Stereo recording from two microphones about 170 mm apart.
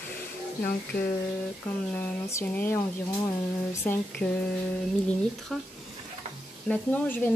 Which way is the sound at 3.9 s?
10° left (ahead or behind).